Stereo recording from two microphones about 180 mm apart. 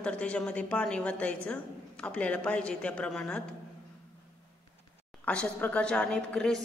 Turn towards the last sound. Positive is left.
turn(degrees=5)  # may be behind; listen again after turning